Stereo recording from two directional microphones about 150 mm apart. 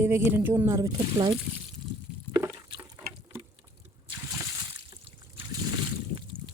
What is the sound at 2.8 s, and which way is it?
Water, 15° right (ahead or behind).